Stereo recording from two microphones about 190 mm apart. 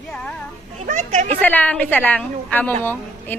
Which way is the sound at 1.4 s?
10° left (ahead or behind).